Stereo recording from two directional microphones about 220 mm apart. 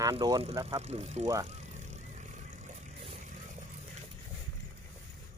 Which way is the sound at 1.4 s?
30° right (ahead or behind).